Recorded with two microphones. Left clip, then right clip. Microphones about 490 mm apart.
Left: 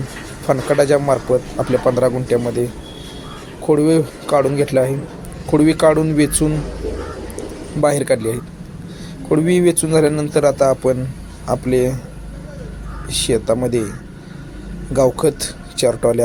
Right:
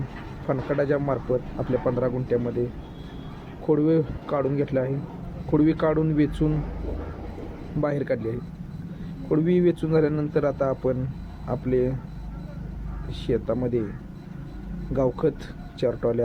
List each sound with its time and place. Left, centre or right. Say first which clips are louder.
0.4 s a man's voice: left 10 dB; right
3.7 s a man's voice: left 7 dB; right
7.8 s a man's voice: left 10 dB; right
13.1 s a man's voice: left 10 dB; right
14.9 s a man's voice: left 9 dB; right